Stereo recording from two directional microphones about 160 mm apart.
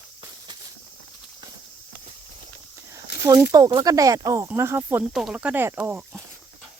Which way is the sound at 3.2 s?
20° right (ahead or behind).